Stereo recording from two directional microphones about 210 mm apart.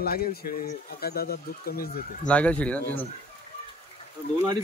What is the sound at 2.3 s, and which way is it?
Speech, 5° left (ahead or behind).